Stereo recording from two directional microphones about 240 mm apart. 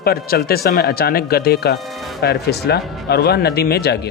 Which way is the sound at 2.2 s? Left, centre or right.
Left.